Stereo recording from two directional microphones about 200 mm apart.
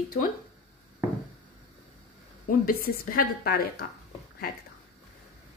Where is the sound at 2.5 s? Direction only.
45° left (ahead or behind).